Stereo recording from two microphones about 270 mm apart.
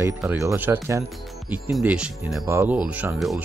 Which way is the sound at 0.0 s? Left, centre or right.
Centre.